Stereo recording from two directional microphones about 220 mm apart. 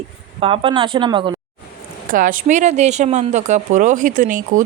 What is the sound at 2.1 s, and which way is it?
A woman's voice, 35° right (ahead or behind).